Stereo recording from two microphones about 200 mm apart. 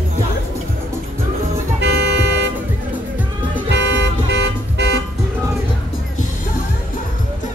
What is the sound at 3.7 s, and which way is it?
Car alarm, 60° right (ahead or behind).